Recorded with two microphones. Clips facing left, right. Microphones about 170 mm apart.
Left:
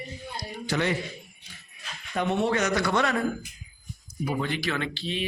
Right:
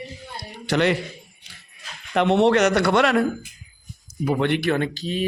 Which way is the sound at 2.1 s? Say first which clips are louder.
Right 8 dB; 80° right.